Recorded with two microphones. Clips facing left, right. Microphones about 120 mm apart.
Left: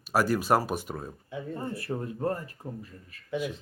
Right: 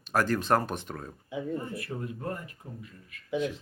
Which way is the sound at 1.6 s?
30° left (ahead or behind).